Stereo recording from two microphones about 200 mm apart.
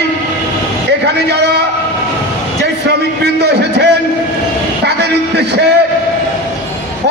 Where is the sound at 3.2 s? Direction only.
55° right (ahead or behind).